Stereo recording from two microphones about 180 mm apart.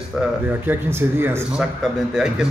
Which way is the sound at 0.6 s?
10° right (ahead or behind).